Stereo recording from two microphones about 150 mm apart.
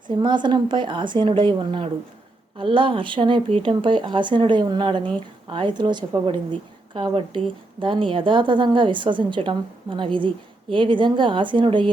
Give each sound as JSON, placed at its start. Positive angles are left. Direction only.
{"t": 0.2, "sound": "a woman's voice", "side_deg": -30}